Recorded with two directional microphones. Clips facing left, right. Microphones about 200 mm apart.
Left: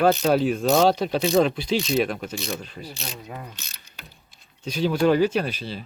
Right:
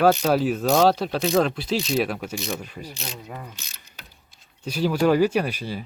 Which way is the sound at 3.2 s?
5° left (ahead or behind).